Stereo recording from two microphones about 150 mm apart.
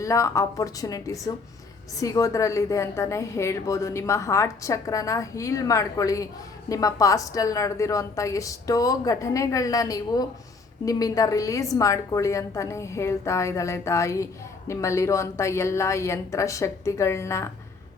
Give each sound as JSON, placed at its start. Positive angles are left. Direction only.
{"t": 0.0, "sound": "a woman's voice", "side_deg": 20}